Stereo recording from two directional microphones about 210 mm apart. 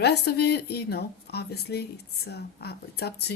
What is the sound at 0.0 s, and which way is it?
Speech, 50° left (ahead or behind).